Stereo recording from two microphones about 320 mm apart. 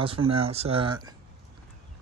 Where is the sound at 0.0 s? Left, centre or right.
Centre.